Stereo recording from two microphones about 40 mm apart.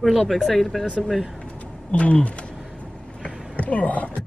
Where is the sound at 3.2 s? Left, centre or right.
Left.